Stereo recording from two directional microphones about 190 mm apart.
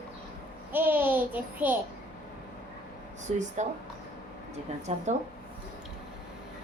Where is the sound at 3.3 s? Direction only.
40° right (ahead or behind).